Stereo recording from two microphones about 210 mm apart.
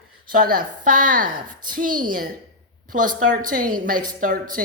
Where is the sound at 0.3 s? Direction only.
45° right (ahead or behind).